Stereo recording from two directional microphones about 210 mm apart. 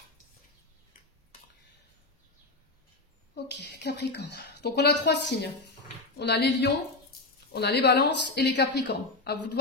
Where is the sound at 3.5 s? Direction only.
50° left (ahead or behind).